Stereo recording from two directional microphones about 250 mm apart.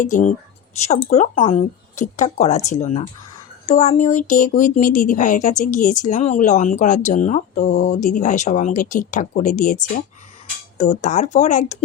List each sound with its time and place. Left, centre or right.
0.0 s speech: left